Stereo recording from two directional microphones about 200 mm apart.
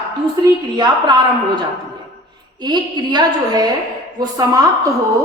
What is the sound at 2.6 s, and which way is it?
A woman's voice, 20° right (ahead or behind).